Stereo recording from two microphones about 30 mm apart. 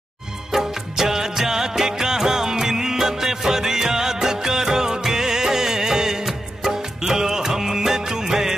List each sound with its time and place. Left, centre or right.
0.5 s music of bollywood: centre
6.6 s music: centre